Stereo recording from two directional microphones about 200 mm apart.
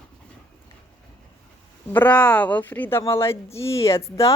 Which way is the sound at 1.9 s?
10° left (ahead or behind).